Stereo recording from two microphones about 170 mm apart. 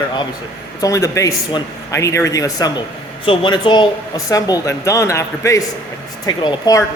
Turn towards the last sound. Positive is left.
turn(degrees=20)  # may be behind; listen again after turning